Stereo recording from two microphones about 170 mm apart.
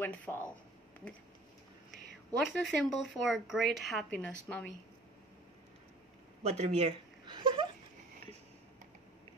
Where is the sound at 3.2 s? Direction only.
Centre (ahead or behind).